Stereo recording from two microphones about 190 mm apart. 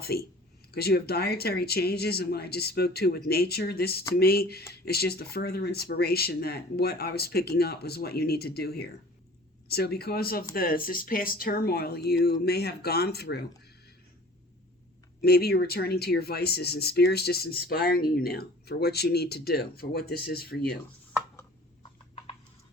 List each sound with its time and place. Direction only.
0.0 s speech: 55° left (ahead or behind)
15.2 s speech: 55° left (ahead or behind)